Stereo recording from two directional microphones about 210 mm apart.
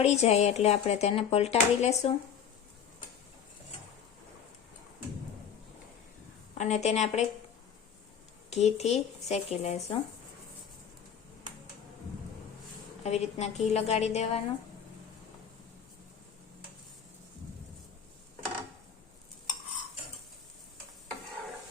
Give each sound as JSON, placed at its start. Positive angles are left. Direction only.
{"t": 0.0, "sound": "speech", "side_deg": 30}
{"t": 6.5, "sound": "speech", "side_deg": 30}
{"t": 8.4, "sound": "speech", "side_deg": 30}
{"t": 13.0, "sound": "speech", "side_deg": 30}